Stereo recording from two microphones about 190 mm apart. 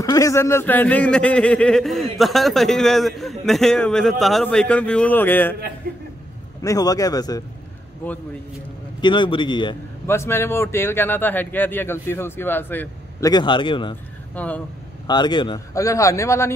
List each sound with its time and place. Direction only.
0.0 s a man's voice: 20° left (ahead or behind)
6.6 s speech: 20° left (ahead or behind)
8.0 s speech: 10° left (ahead or behind)
9.0 s speech: 25° left (ahead or behind)
10.0 s speech: 15° left (ahead or behind)
13.3 s speech: 25° left (ahead or behind)
14.3 s speech: 10° left (ahead or behind)
15.0 s speech: 25° left (ahead or behind)